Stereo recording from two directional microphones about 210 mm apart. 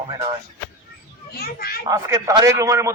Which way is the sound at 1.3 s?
45° left (ahead or behind).